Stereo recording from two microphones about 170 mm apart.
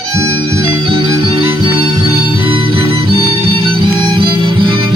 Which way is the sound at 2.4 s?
30° right (ahead or behind).